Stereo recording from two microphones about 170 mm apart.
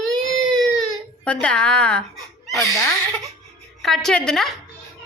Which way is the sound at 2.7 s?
20° left (ahead or behind).